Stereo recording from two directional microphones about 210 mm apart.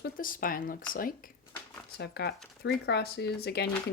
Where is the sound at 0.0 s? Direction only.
40° left (ahead or behind).